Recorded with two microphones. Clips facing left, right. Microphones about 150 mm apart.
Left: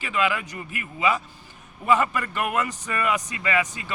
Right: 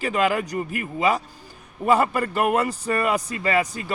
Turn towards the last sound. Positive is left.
turn(degrees=-35)  # may be behind; listen again after turning